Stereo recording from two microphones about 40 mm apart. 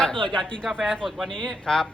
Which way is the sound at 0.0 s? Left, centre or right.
Centre.